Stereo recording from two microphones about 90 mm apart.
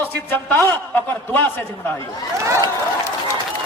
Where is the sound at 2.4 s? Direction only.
35° right (ahead or behind).